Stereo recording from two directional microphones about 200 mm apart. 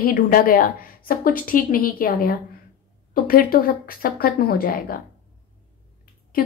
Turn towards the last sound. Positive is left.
turn(degrees=45)  # may be behind; listen again after turning